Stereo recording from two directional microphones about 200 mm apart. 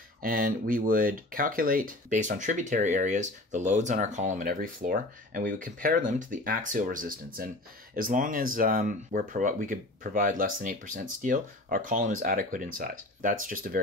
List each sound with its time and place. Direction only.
0.2 s speech: 45° right (ahead or behind)